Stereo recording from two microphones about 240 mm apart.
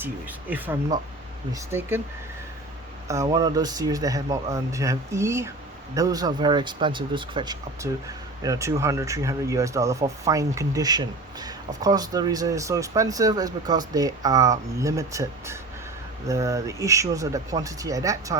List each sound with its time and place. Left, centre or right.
0.0 s speech: centre
3.1 s speech: centre